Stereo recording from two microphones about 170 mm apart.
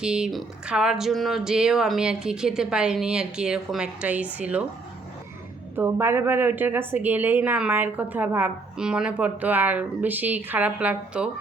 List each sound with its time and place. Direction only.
0.0 s speech: 5° right (ahead or behind)
5.7 s a woman's voice: 15° right (ahead or behind)